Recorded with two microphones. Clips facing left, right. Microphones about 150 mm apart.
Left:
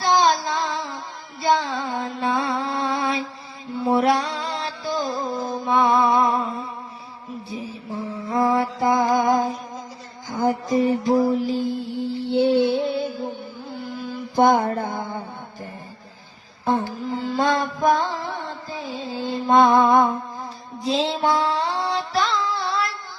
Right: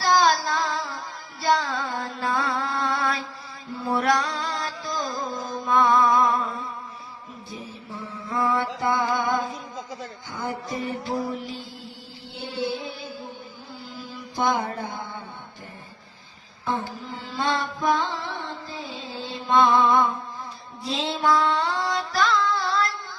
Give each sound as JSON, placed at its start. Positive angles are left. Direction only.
{"t": 0.0, "sound": "carnatic music", "side_deg": 25}
{"t": 0.4, "sound": "music", "side_deg": 0}
{"t": 1.9, "sound": "carnatic music", "side_deg": 0}
{"t": 2.3, "sound": "music", "side_deg": 0}
{"t": 2.6, "sound": "mantra", "side_deg": 30}
{"t": 3.8, "sound": "music", "side_deg": 30}
{"t": 7.5, "sound": "mantra", "side_deg": 35}
{"t": 10.3, "sound": "a sound", "side_deg": 35}
{"t": 11.8, "sound": "music", "side_deg": 65}
{"t": 14.3, "sound": "music", "side_deg": 50}
{"t": 16.6, "sound": "a sound", "side_deg": 40}
{"t": 17.7, "sound": "music", "side_deg": 45}
{"t": 20.8, "sound": "a sound", "side_deg": 35}
{"t": 22.4, "sound": "a sound", "side_deg": 0}